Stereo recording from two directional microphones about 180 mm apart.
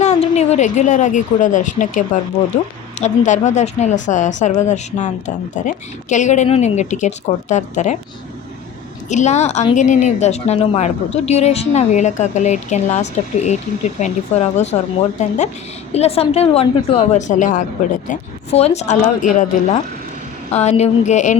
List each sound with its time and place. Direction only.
0.0 s a woman's voice: 40° left (ahead or behind)
9.0 s a woman's voice: 40° left (ahead or behind)
15.9 s a woman's voice: 35° left (ahead or behind)